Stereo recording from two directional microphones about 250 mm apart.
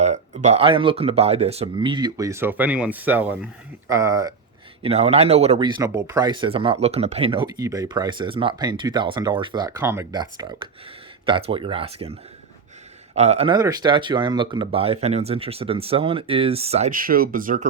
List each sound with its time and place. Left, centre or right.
0.0 s speech: right
4.8 s speech: right
13.1 s speech: right